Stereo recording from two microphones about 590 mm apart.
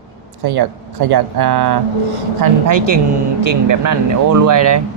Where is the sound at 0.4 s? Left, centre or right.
Right.